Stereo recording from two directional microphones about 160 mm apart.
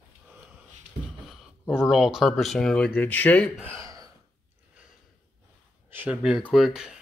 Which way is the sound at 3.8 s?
20° right (ahead or behind).